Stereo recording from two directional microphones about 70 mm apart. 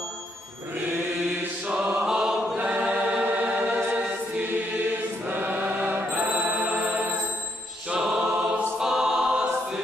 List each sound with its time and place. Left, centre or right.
2.0 s choir: centre
3.5 s music: right
5.2 s choir: right
6.1 s music: centre
7.9 s choir: centre